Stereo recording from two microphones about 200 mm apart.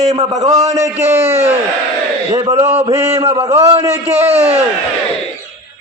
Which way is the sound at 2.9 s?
15° right (ahead or behind).